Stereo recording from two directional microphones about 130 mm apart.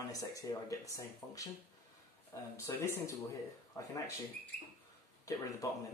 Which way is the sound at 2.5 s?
20° left (ahead or behind).